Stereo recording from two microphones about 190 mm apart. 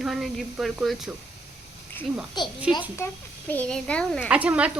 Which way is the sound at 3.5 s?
5° left (ahead or behind).